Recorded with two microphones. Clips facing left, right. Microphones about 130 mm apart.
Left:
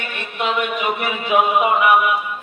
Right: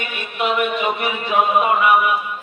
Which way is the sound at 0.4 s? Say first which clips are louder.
Right 1 dB; 5° right (ahead or behind).